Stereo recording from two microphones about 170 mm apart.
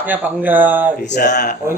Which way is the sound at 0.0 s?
10° right (ahead or behind).